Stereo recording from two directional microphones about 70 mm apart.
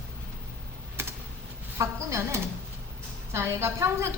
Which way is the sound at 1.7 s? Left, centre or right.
Right.